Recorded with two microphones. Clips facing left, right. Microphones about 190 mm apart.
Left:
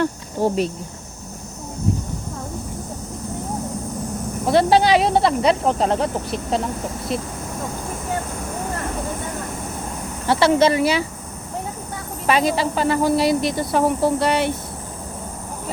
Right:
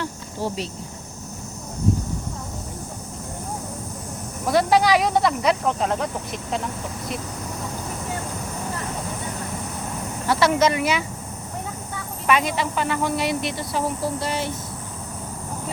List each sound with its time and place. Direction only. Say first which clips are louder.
0.0 s cricket: left 8 dB; 50° left (ahead or behind)
4.4 s speech: left 3 dB; 25° left (ahead or behind)
10.2 s speech: left 4 dB; 30° left (ahead or behind)
12.2 s speech: left 3 dB; 35° left (ahead or behind)
13.7 s speech: left 8 dB; 60° left (ahead or behind)